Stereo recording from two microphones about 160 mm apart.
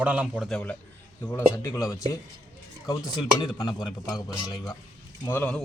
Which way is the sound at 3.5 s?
25° left (ahead or behind).